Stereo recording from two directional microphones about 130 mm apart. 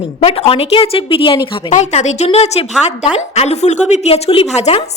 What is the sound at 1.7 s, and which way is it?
A woman's voice, 65° left (ahead or behind).